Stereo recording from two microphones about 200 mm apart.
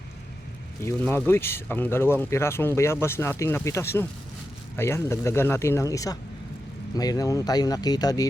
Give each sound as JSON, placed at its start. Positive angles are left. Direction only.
{"t": 0.8, "sound": "speech", "side_deg": 10}